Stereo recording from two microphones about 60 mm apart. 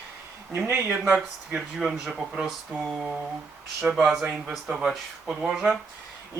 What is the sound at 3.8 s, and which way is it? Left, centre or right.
Speech, centre.